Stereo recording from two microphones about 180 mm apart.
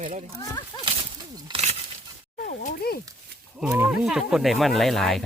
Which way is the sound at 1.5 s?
35° right (ahead or behind).